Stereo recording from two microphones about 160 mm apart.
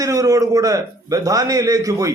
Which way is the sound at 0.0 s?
20° right (ahead or behind).